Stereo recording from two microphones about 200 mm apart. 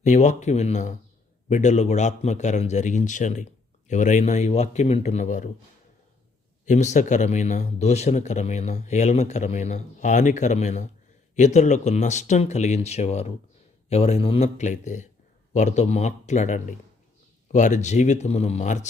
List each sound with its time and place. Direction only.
0.0 s speech: 35° left (ahead or behind)
6.7 s speech: 35° left (ahead or behind)